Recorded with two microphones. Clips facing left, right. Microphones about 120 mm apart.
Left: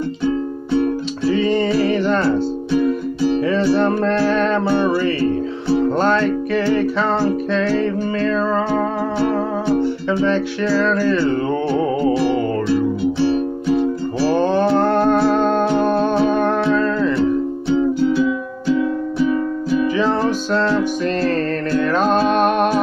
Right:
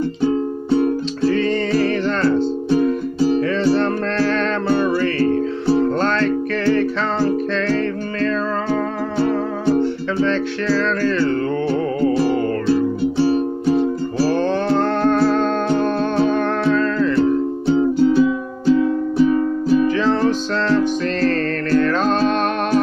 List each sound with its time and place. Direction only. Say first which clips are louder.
0.2 s music: right 2 dB; 35° right (ahead or behind)
1.3 s music: left 4 dB; 10° left (ahead or behind)
5.9 s music: left 2 dB; 10° left (ahead or behind)
9.8 s music: even; 10° left (ahead or behind)
12.6 s music: even; 35° right (ahead or behind)
14.3 s music: left 5 dB; 10° left (ahead or behind)
17.2 s music: right 1 dB; 40° right (ahead or behind)
19.9 s music: right 1 dB; 10° left (ahead or behind)